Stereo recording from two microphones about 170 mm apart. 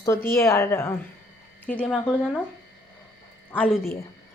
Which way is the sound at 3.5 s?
10° left (ahead or behind).